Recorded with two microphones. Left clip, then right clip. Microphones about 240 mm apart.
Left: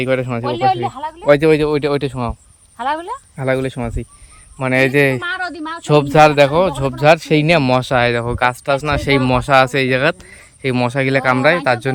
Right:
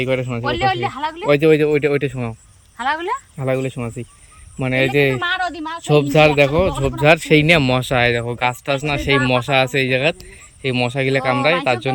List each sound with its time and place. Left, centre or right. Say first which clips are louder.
0.0 s speech: left 2 dB; centre
0.7 s speech: left 3 dB; left
1.2 s speech: left 2 dB; centre
2.7 s a sound: even; left
3.3 s speech: left 3 dB; centre
5.3 s a sound: right 1 dB; right
5.9 s speech: left 3 dB; centre